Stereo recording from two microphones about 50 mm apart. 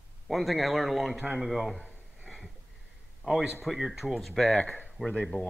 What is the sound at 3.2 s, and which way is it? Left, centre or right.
A man's voice, centre.